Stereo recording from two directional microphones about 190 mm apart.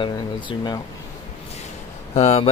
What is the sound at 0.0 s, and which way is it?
Speech, 25° left (ahead or behind).